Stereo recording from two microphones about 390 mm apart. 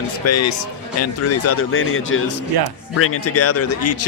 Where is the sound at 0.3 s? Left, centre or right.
Left.